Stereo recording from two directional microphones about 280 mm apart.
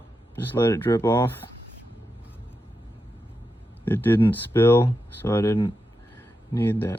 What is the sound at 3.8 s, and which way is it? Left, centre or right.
Speech, centre.